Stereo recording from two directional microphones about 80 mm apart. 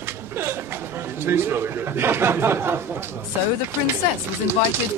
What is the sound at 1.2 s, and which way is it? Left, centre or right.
Speech, right.